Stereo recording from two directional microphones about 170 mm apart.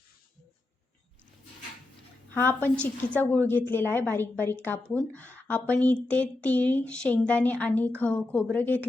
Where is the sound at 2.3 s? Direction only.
10° left (ahead or behind).